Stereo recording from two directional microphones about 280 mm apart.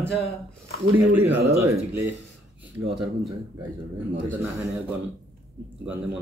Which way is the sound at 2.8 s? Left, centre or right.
Centre.